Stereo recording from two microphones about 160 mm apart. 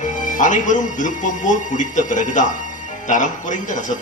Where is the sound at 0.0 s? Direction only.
50° left (ahead or behind).